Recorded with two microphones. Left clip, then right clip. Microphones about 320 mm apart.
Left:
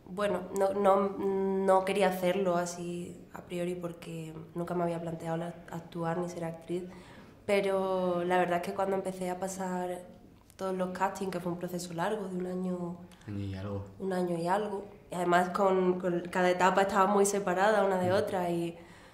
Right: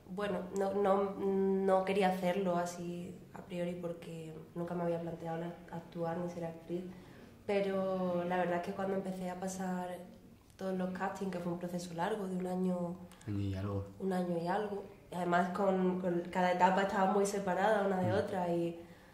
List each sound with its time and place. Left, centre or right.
0.1 s speech: left
12.4 s a woman's voice: centre
13.4 s speech: right
14.0 s speech: left